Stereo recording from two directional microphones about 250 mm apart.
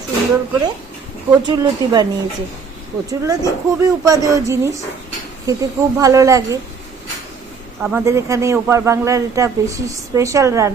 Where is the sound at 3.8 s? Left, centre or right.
Centre.